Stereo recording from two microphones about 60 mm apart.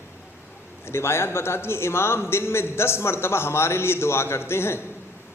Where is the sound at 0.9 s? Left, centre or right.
Left.